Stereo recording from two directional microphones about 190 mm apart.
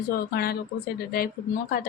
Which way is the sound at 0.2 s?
55° left (ahead or behind).